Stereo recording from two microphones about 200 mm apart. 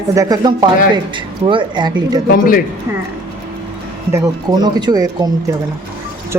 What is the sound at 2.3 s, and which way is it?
Speech, 45° left (ahead or behind).